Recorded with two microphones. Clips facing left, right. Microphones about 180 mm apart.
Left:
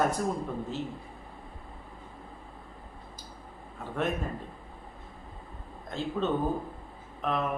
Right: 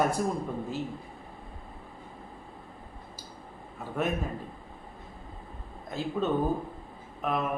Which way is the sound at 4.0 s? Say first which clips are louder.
Even; 5° right (ahead or behind).